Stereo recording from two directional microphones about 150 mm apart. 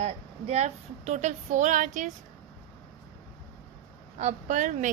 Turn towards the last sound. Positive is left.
turn(degrees=-55)  # may be behind; listen again after turning